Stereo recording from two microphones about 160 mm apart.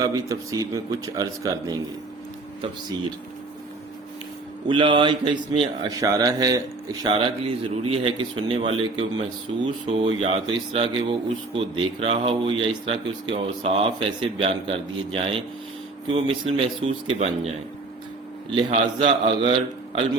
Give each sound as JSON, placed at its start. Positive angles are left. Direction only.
{"t": 0.0, "sound": "a man's voice", "side_deg": -20}
{"t": 4.7, "sound": "a man's voice", "side_deg": -30}
{"t": 7.1, "sound": "speech", "side_deg": -35}
{"t": 18.5, "sound": "speech", "side_deg": -35}